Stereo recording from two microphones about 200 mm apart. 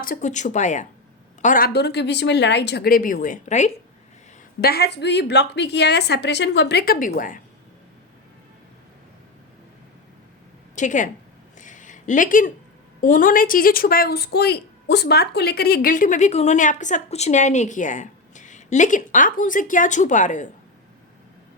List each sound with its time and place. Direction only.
0.0 s a woman's voice: 40° left (ahead or behind)
4.6 s a woman's voice: 50° left (ahead or behind)
10.8 s a woman's voice: 40° left (ahead or behind)
11.5 s a sound: 40° left (ahead or behind)
13.0 s speech: 45° left (ahead or behind)